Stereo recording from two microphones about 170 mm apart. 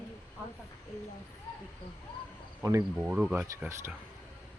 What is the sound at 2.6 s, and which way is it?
Speech, 15° right (ahead or behind).